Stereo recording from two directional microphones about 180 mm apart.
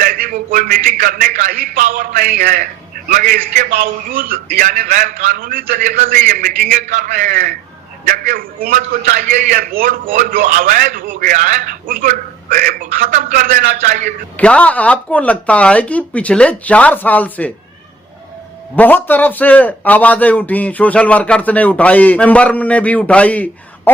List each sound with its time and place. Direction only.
0.0 s a man's voice: 50° right (ahead or behind)
14.3 s a man's voice: 5° left (ahead or behind)
18.8 s a man's voice: 10° left (ahead or behind)